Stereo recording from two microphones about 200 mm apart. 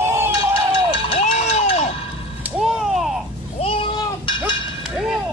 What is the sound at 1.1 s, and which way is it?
Run, 35° left (ahead or behind).